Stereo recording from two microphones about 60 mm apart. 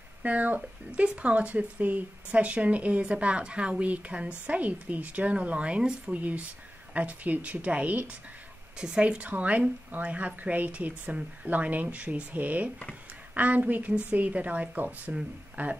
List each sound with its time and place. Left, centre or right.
0.2 s speech: right
8.7 s speech: centre; by 15.7 s right